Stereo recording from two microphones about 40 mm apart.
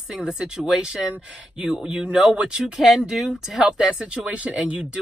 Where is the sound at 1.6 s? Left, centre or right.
Centre.